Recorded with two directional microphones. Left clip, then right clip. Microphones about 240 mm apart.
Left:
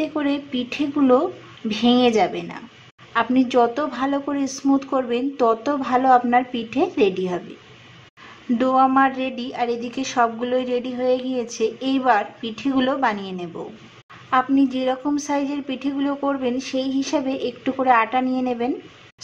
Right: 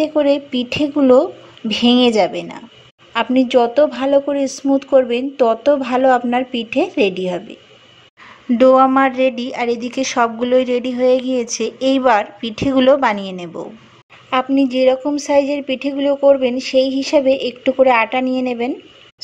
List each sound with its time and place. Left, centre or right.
0.0 s speech: right
8.5 s a woman's voice: right